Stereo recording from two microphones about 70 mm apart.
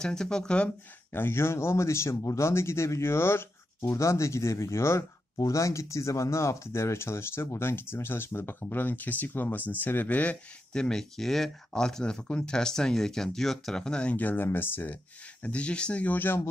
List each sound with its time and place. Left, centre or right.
0.0 s speech: centre
1.1 s speech: left
10.7 s speech: centre
14.1 s speech: left
15.4 s speech: centre